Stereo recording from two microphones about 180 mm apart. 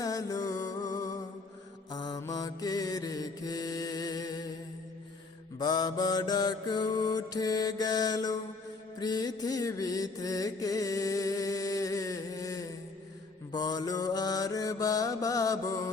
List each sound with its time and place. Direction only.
0.0 s music: 20° left (ahead or behind)
1.9 s mantra: 20° left (ahead or behind)
5.5 s mantra: 25° left (ahead or behind)